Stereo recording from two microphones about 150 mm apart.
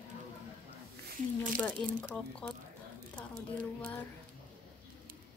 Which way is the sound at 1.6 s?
5° left (ahead or behind).